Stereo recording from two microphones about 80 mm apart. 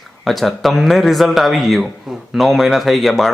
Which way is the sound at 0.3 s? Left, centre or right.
Centre.